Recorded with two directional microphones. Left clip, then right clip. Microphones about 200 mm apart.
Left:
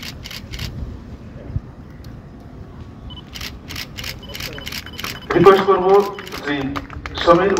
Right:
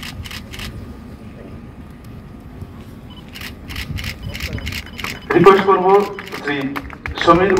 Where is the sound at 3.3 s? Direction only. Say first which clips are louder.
Even; 50° left (ahead or behind).